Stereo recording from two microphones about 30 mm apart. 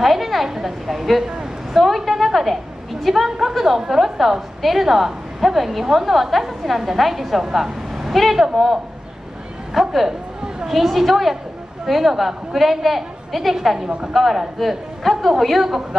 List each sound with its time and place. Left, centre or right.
0.0 s a woman's voice: centre
1.2 s speech: right
1.7 s a woman's voice: centre
7.5 s vehicle: centre
8.1 s a woman's voice: centre
9.8 s a woman's voice: centre